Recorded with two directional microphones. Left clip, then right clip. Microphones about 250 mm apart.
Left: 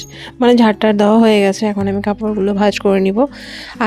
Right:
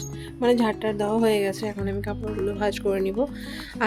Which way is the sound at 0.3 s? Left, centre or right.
Left.